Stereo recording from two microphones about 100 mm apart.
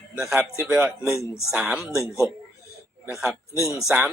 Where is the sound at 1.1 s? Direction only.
30° left (ahead or behind).